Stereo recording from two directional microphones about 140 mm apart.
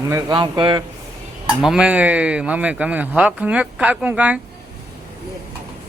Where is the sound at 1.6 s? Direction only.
5° right (ahead or behind).